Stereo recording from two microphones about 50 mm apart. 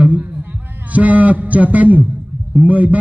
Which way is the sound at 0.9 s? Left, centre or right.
Right.